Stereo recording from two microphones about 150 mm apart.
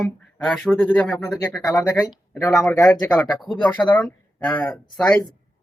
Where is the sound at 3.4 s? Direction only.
Centre (ahead or behind).